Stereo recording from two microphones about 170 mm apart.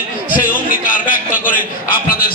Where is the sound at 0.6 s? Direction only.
55° left (ahead or behind).